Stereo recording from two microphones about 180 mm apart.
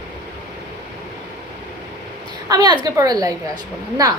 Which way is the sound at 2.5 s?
20° right (ahead or behind).